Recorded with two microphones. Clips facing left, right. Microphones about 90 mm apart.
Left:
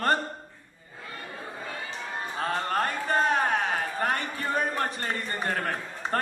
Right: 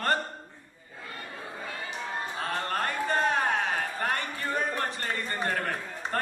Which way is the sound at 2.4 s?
25° left (ahead or behind).